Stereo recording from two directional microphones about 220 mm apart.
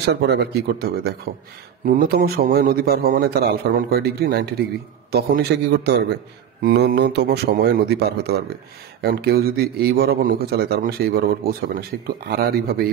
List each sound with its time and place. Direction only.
0.0 s a man's voice: 50° right (ahead or behind)